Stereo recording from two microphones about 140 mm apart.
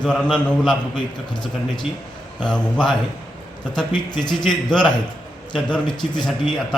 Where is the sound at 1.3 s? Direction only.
35° left (ahead or behind).